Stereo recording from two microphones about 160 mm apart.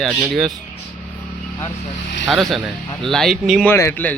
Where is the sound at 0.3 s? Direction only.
Centre (ahead or behind).